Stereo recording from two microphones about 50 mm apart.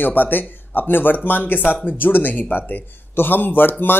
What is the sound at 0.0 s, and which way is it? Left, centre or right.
Speech, left.